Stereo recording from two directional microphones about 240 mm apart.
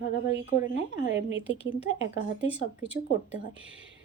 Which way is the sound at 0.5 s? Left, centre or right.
Left.